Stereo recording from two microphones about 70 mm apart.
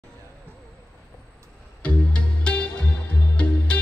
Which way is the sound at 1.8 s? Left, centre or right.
Centre.